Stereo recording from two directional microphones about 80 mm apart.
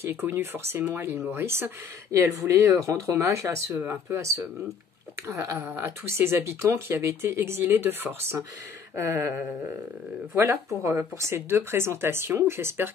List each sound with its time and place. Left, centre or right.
0.0 s speech: right
5.4 s speech: right
8.9 s speech: right